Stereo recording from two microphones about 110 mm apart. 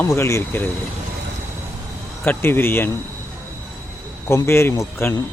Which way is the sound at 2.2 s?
20° left (ahead or behind).